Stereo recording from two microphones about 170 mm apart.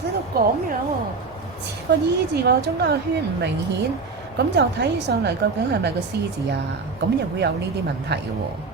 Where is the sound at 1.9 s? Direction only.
85° right.